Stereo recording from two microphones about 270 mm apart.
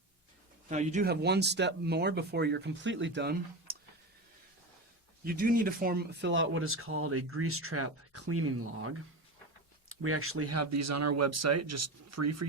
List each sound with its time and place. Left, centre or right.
0.7 s speech: right
5.2 s speech: right